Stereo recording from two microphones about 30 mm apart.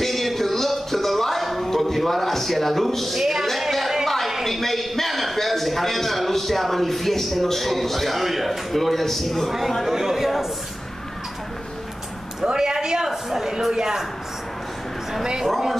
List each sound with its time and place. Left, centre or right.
0.0 s music: centre
3.2 s a man's voice: centre
4.0 s a sound: centre
4.5 s a man's voice: centre
9.9 s a man's voice: centre
12.4 s speech: right
12.7 s a sound: centre
13.1 s a woman's voice: centre
15.2 s a woman's voice: centre